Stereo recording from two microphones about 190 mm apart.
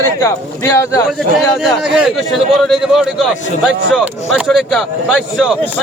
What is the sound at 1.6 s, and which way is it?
Speech, centre (ahead or behind).